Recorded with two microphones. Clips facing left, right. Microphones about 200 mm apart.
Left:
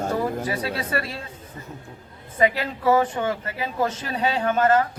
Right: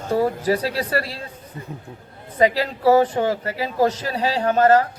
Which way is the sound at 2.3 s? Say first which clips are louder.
Right 3 dB; 35° right (ahead or behind).